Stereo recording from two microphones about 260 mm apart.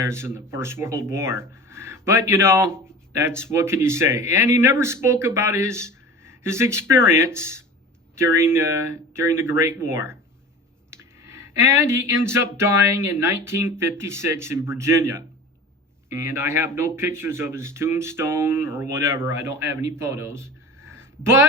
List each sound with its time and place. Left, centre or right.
0.0 s speech: centre